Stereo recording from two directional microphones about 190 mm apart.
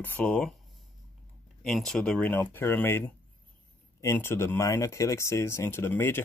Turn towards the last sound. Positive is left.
turn(degrees=10)  # may be behind; listen again after turning